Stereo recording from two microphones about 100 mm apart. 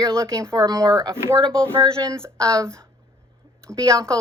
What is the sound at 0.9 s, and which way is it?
Speech, 50° right (ahead or behind).